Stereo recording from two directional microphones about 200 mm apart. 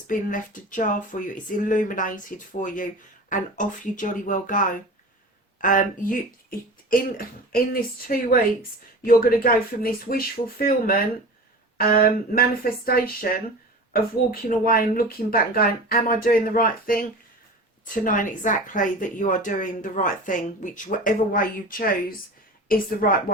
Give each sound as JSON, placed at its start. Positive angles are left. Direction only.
{"t": 0.1, "sound": "speech", "side_deg": 40}